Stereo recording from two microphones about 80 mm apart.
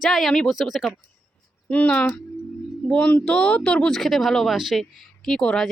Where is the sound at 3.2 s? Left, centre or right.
Centre.